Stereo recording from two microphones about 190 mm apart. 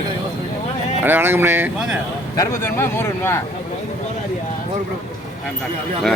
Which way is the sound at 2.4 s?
15° left (ahead or behind).